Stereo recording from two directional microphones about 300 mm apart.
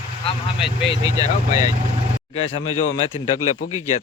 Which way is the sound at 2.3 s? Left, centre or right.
Centre.